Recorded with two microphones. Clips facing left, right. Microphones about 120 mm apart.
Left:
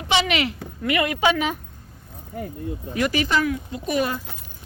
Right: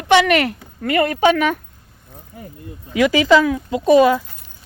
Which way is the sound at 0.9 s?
40° right (ahead or behind).